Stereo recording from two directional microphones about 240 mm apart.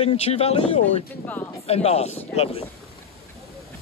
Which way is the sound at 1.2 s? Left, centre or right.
Centre.